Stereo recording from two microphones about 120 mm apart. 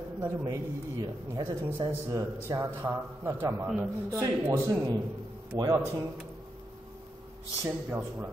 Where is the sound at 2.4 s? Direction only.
25° right (ahead or behind).